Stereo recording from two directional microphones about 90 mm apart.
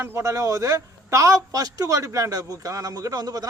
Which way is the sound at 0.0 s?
35° right (ahead or behind).